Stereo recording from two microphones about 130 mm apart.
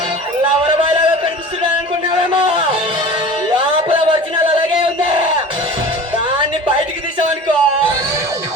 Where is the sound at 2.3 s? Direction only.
45° right (ahead or behind).